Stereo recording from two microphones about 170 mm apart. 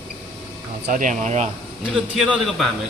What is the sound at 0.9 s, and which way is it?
Speech, 50° right (ahead or behind).